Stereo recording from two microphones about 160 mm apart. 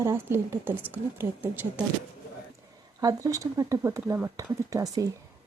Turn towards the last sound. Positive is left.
turn(degrees=-20)  # may be behind; listen again after turning